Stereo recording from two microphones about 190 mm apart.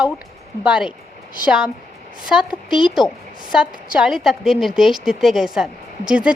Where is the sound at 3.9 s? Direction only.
5° right (ahead or behind).